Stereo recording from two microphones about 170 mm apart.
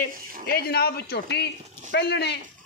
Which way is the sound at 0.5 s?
65° left (ahead or behind).